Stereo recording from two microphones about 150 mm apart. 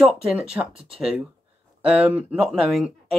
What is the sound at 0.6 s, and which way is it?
Speech, 20° right (ahead or behind).